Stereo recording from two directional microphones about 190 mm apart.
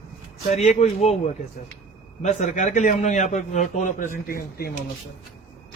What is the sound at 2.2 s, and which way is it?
A man's voice, 35° left (ahead or behind).